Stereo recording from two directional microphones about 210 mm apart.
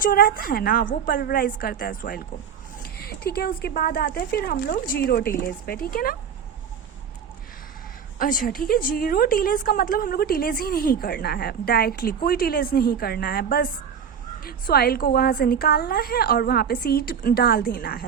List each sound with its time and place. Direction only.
0.0 s a woman's voice: 45° left (ahead or behind)
8.2 s a woman's voice: 40° left (ahead or behind)